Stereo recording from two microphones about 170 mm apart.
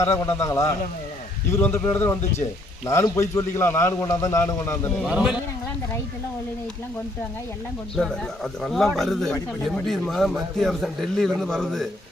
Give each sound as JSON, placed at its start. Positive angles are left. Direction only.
{"t": 0.3, "sound": "a man's voice", "side_deg": 15}
{"t": 4.9, "sound": "speech", "side_deg": -5}
{"t": 7.9, "sound": "speech", "side_deg": 5}